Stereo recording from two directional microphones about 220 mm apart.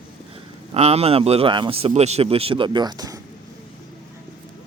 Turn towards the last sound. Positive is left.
turn(degrees=-15)  # may be behind; listen again after turning